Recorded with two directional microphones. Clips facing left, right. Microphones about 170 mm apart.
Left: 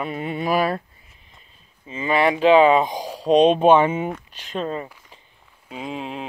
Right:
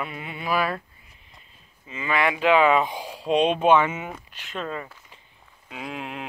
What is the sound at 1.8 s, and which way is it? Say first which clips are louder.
Speech: left 5 dB; 30° left (ahead or behind).